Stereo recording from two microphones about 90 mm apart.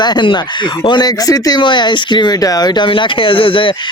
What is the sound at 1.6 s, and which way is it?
Speech, 60° left (ahead or behind).